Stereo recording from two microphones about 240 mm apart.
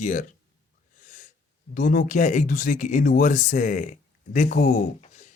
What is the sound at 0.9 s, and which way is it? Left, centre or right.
Wheeze, left.